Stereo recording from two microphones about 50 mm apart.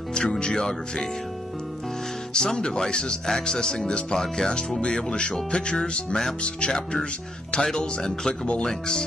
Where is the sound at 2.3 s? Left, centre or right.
Centre.